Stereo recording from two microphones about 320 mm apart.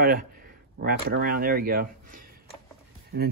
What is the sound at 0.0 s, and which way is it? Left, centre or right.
Speech, right.